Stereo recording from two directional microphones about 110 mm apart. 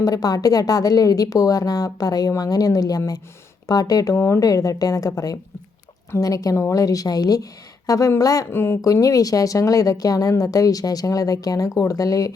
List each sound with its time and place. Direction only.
0.0 s speech: 35° left (ahead or behind)
8.4 s speech: 20° left (ahead or behind)